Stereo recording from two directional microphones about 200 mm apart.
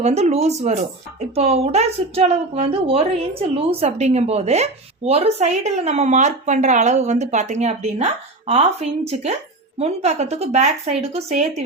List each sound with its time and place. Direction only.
0.0 s a woman's voice: 30° right (ahead or behind)